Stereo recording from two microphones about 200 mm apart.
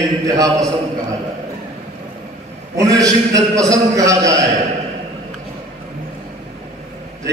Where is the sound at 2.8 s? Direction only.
15° right (ahead or behind).